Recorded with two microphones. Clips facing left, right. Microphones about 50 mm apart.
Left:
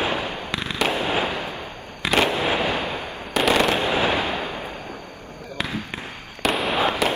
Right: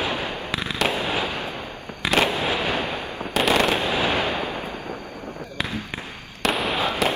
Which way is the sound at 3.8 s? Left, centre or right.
Left.